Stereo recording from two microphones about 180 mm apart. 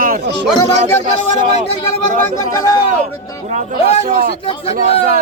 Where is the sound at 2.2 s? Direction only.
15° left (ahead or behind).